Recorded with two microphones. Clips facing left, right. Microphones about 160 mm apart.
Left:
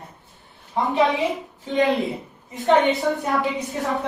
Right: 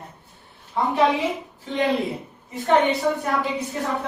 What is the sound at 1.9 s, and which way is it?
Speech, centre (ahead or behind).